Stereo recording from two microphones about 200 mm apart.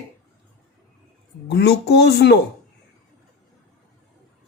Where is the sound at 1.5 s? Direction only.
55° left (ahead or behind).